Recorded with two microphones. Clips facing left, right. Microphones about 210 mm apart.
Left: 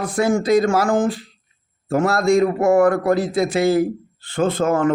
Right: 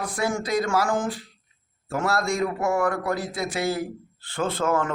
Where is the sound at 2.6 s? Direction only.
50° left (ahead or behind).